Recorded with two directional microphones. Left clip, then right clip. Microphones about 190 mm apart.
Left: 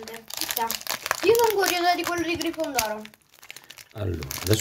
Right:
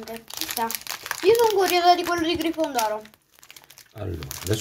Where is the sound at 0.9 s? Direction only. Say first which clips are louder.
Right 1 dB; 10° left (ahead or behind).